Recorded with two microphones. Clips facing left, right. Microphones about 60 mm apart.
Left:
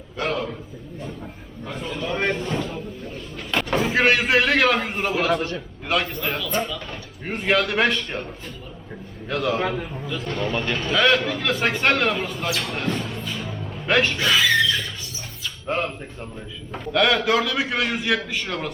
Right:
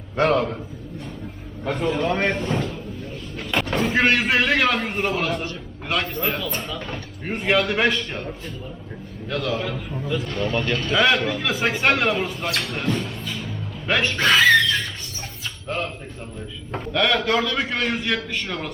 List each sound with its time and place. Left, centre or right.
0.2 s a man's voice: right
1.6 s a man's voice: right
2.4 s speech: centre
9.3 s speech: centre
9.6 s a man's voice: left
9.9 s speech: centre
10.9 s speech: centre
12.6 s music: centre
14.2 s a sound: right
15.7 s speech: centre
16.8 s speech: centre